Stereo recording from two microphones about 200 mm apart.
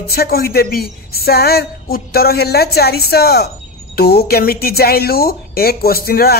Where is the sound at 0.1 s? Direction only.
50° left (ahead or behind).